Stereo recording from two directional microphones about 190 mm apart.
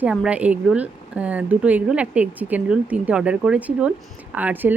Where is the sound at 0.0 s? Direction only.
5° right (ahead or behind).